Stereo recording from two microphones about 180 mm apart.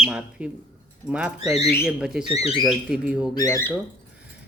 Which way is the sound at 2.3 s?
35° left (ahead or behind).